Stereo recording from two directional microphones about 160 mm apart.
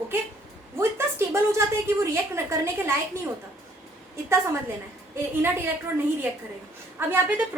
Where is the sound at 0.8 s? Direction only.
15° right (ahead or behind).